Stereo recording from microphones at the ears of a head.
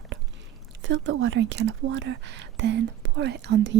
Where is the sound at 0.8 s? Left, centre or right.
Right.